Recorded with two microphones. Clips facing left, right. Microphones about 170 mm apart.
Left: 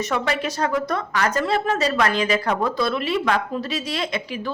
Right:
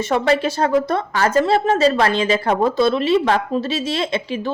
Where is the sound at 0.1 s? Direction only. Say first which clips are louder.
Right 6 dB; 30° right (ahead or behind).